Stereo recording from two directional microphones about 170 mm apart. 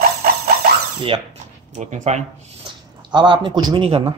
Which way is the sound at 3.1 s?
25° right (ahead or behind).